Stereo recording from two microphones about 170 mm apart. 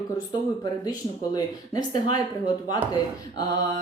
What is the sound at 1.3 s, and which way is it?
Speech, 20° left (ahead or behind).